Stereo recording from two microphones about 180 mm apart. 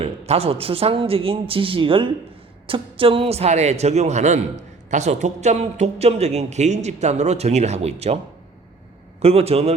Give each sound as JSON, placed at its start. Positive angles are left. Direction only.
{"t": 0.0, "sound": "a man's voice", "side_deg": -35}
{"t": 9.2, "sound": "a man's voice", "side_deg": -35}